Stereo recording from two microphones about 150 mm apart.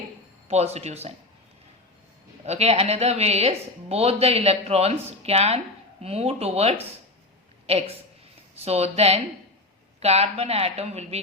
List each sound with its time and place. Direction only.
0.4 s a woman's voice: 45° right (ahead or behind)
2.5 s a woman's voice: 45° right (ahead or behind)